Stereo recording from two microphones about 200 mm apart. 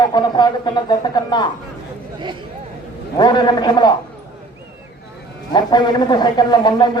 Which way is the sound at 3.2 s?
20° left (ahead or behind).